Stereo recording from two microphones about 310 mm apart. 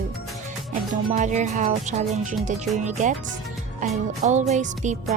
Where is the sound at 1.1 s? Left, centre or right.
Right.